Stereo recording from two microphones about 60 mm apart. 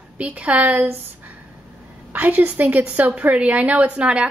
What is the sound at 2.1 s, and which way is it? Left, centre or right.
A woman's voice, right.